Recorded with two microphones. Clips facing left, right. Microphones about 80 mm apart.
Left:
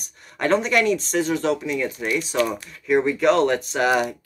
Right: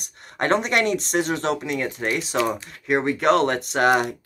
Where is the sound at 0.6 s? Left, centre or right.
Right.